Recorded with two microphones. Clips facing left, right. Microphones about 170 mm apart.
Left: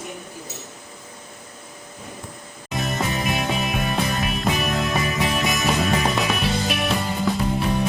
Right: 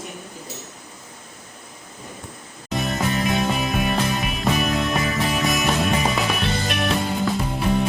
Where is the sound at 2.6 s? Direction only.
Centre (ahead or behind).